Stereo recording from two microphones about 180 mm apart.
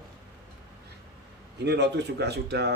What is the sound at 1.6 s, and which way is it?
Speech, 70° right (ahead or behind).